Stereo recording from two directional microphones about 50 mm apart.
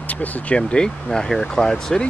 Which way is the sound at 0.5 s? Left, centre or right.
Centre.